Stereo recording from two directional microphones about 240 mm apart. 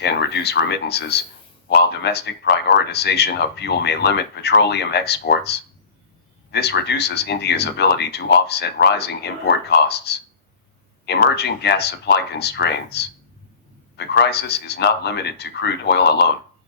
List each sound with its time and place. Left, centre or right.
0.0 s speech: left